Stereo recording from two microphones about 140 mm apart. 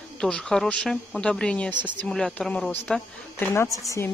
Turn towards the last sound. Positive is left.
turn(degrees=20)  # may be behind; listen again after turning